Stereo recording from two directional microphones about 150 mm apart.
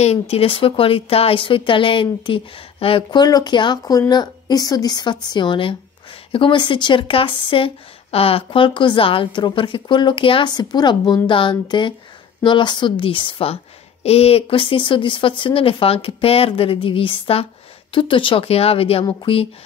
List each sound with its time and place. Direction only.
0.0 s a woman's voice: 45° left (ahead or behind)